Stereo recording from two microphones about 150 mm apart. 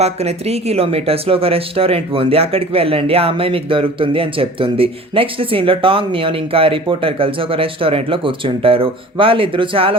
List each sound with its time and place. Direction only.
0.0 s speech: 45° right (ahead or behind)